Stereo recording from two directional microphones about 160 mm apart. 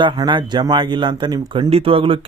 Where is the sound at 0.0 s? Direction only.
30° right (ahead or behind).